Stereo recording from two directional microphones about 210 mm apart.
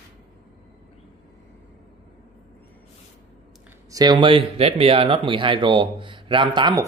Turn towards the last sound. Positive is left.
turn(degrees=-20)  # may be behind; listen again after turning